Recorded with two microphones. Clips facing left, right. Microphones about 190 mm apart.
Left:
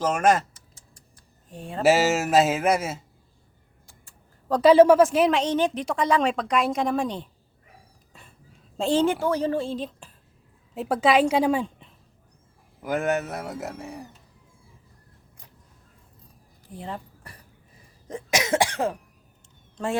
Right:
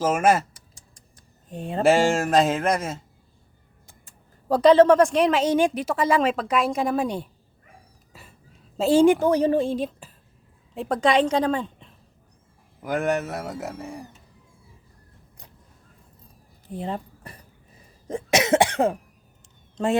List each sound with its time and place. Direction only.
0.0 s typing: 5° right (ahead or behind)
1.8 s speech: 5° left (ahead or behind)
3.8 s tick: 20° right (ahead or behind)
4.6 s speech: 10° left (ahead or behind); by 7.3 s 10° right (ahead or behind)
8.1 s a sound: 5° right (ahead or behind)
8.8 s a woman's voice: 10° right (ahead or behind)
10.8 s speech: 5° left (ahead or behind)
16.6 s keys jangling: 25° right (ahead or behind)
18.1 s cough: 30° right (ahead or behind)
19.7 s speech: 20° right (ahead or behind)